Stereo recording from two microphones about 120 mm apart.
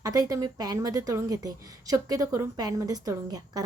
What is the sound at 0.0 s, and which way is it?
A woman's voice, 30° right (ahead or behind).